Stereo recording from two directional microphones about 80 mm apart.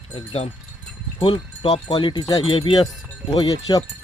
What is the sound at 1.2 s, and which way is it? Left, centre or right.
Speech, left.